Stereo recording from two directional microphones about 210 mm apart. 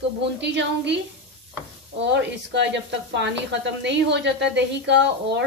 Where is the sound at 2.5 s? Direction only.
55° right (ahead or behind).